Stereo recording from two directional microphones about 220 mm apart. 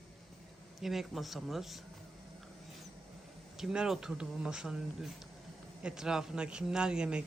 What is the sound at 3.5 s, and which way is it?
A man's voice, 5° right (ahead or behind).